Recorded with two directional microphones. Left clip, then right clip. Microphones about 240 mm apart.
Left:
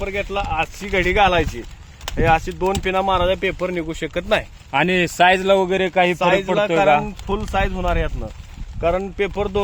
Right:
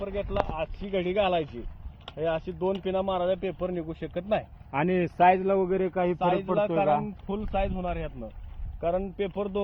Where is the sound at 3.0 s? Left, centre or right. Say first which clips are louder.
Left 9 dB; left.